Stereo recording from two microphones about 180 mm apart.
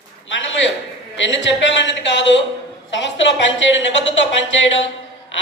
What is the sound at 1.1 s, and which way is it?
A woman's voice, 85° left.